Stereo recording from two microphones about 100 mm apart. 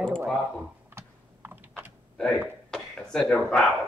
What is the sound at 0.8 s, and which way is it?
Computer keyboard, 20° right (ahead or behind).